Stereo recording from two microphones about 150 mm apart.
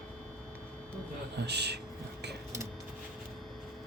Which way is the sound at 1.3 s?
90° right.